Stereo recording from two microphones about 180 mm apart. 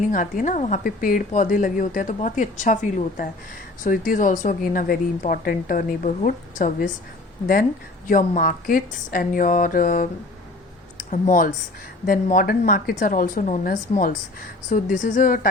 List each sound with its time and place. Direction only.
0.1 s a woman's voice: 50° left (ahead or behind)
8.3 s a woman's voice: 45° left (ahead or behind)